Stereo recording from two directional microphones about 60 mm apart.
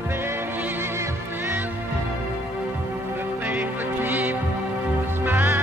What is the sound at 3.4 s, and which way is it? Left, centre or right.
Music, right.